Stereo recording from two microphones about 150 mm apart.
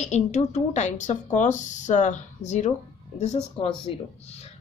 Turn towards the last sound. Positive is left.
turn(degrees=35)  # may be behind; listen again after turning